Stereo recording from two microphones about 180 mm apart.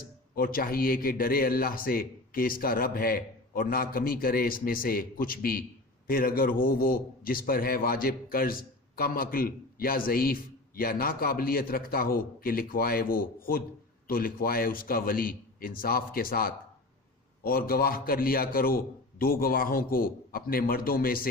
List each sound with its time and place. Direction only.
0.0 s a man's voice: 55° left (ahead or behind)